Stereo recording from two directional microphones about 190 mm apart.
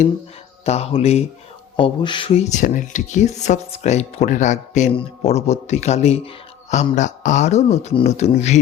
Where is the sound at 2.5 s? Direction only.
40° left (ahead or behind).